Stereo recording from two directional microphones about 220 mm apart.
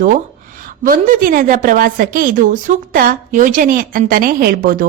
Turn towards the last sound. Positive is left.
turn(degrees=-40)  # may be behind; listen again after turning